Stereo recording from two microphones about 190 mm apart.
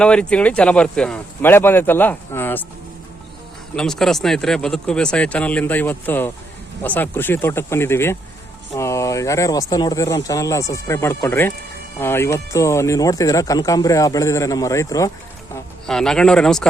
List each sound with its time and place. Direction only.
0.0 s speech: 5° left (ahead or behind)
3.8 s speech: centre (ahead or behind); by 15.1 s 15° left (ahead or behind)
15.9 s speech: 5° left (ahead or behind)